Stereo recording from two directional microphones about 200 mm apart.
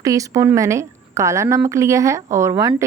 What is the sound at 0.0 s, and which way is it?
A woman's voice, 15° right (ahead or behind).